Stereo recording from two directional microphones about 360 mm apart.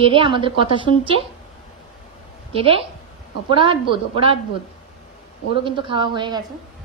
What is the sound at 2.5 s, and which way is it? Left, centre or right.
A woman's voice, centre.